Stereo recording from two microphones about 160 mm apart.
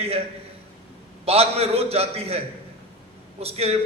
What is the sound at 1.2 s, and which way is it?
A man's voice, 40° right (ahead or behind).